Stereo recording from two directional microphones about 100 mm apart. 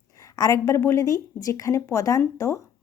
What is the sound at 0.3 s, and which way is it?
Speech, 35° left (ahead or behind).